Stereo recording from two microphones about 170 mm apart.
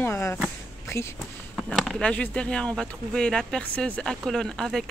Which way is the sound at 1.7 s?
Centre (ahead or behind).